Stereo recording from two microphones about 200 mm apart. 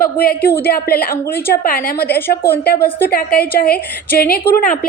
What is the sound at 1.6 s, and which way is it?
A woman's voice, 45° left (ahead or behind).